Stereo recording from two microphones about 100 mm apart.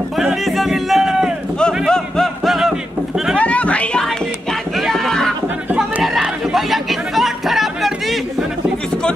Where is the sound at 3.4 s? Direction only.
15° left (ahead or behind).